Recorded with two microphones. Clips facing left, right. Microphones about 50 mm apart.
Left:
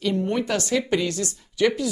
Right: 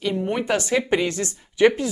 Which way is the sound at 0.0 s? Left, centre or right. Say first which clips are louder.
Even; centre.